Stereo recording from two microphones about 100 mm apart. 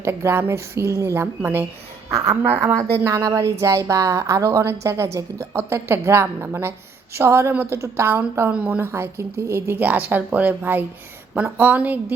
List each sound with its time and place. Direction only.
0.0 s a woman's voice: 25° right (ahead or behind)
8.8 s a woman's voice: 25° right (ahead or behind)